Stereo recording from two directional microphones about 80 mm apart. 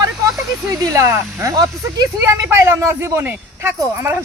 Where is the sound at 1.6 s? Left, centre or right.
Right.